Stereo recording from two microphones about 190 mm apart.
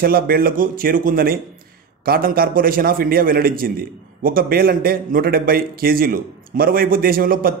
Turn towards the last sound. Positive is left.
turn(degrees=-50)  # may be behind; listen again after turning